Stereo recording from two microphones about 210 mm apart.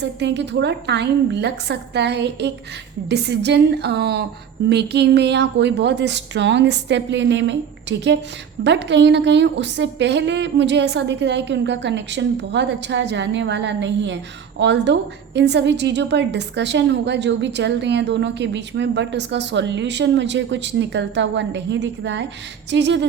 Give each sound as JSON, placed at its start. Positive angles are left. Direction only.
{"t": 0.0, "sound": "a woman's voice", "side_deg": -55}